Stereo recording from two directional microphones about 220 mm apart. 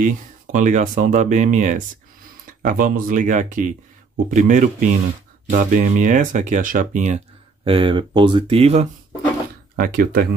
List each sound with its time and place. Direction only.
0.0 s speech: 35° right (ahead or behind)
7.6 s speech: 25° right (ahead or behind)
9.8 s speech: 40° right (ahead or behind)